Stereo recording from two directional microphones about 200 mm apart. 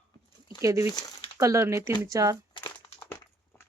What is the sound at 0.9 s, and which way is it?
Speech, 20° left (ahead or behind).